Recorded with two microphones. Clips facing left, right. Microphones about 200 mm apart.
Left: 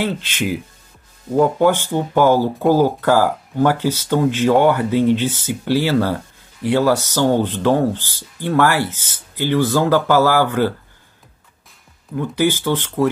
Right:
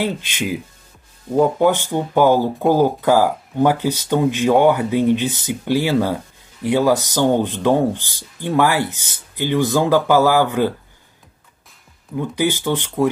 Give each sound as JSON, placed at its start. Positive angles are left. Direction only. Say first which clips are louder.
{"t": 0.0, "sound": "speech", "louder": "left 1 dB", "side_deg": -15}
{"t": 12.2, "sound": "speech", "louder": "left 2 dB", "side_deg": -15}